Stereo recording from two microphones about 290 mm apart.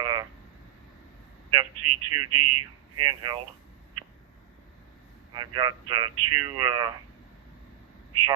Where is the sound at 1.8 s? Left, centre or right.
Right.